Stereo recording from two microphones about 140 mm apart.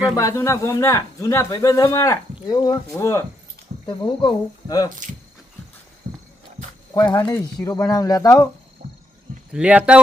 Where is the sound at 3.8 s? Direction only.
35° left (ahead or behind).